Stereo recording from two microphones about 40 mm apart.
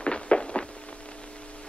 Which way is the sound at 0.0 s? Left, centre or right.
Left.